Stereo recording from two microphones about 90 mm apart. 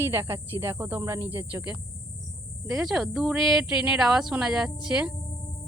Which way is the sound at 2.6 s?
Centre (ahead or behind).